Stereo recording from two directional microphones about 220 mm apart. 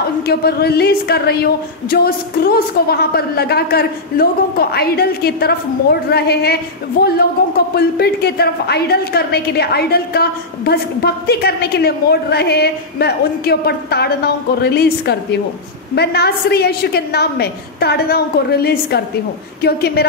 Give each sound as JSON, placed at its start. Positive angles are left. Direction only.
{"t": 0.3, "sound": "speech", "side_deg": 45}